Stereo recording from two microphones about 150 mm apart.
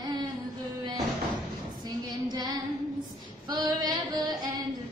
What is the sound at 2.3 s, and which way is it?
Female singing, 25° right (ahead or behind).